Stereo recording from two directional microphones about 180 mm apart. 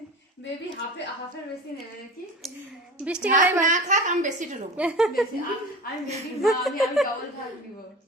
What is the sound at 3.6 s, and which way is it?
Speech, 45° right (ahead or behind).